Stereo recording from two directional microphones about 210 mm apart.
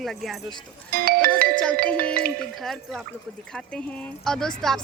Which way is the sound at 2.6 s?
Centre (ahead or behind).